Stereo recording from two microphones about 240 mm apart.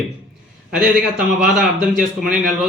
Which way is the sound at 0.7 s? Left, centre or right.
Centre.